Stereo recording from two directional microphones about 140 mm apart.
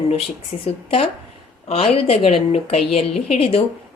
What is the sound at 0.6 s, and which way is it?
Speech, 40° left (ahead or behind).